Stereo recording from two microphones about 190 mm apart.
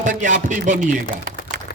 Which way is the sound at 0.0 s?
40° right (ahead or behind).